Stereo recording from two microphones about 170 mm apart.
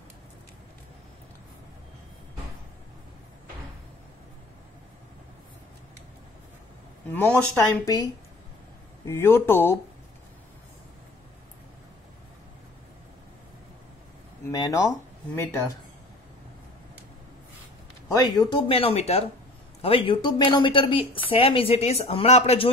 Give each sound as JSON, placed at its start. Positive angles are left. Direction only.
{"t": 7.1, "sound": "speech", "side_deg": 10}
{"t": 14.4, "sound": "a sound", "side_deg": 20}
{"t": 18.1, "sound": "a woman's voice", "side_deg": 20}